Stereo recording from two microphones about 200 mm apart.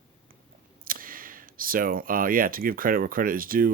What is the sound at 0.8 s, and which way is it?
Speech, 45° right (ahead or behind).